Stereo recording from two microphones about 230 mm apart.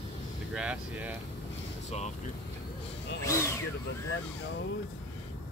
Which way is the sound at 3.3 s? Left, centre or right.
Centre.